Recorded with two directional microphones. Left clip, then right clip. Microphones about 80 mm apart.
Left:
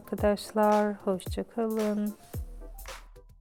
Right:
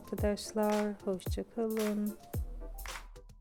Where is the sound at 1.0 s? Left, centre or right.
Left.